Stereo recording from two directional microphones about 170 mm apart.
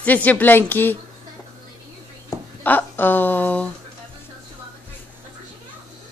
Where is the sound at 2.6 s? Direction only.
10° left (ahead or behind).